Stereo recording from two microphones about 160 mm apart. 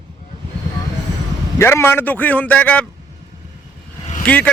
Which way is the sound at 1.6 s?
15° left (ahead or behind).